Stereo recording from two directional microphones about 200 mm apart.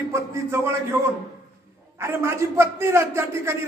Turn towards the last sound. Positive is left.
turn(degrees=-15)  # may be behind; listen again after turning